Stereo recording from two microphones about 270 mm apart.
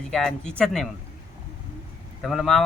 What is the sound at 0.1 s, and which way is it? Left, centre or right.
Speech, centre.